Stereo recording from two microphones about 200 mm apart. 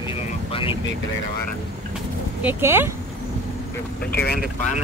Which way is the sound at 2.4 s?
10° right (ahead or behind).